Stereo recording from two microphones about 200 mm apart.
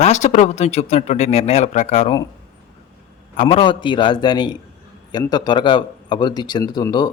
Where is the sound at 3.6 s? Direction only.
25° left (ahead or behind).